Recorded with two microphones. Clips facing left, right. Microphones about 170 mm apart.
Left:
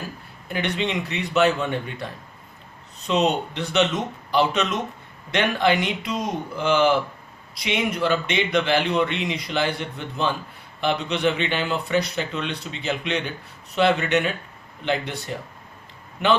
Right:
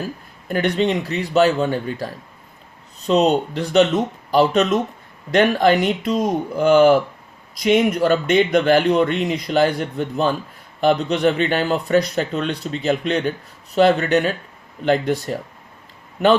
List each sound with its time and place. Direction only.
0.4 s a man's voice: 45° right (ahead or behind)